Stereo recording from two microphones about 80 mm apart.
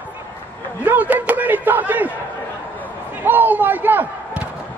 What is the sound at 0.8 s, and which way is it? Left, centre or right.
A man's voice, right.